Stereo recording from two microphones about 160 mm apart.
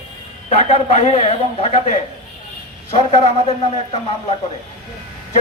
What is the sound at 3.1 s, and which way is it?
Speech, 40° left (ahead or behind).